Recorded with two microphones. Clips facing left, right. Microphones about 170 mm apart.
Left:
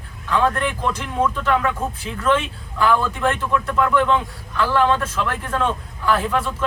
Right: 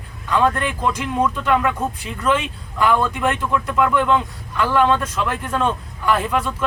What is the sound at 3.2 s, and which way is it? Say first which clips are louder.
Speech: even; 5° right (ahead or behind).